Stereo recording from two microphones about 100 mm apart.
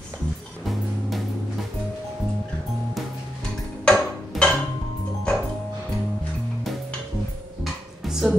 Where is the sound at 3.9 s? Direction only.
10° left (ahead or behind).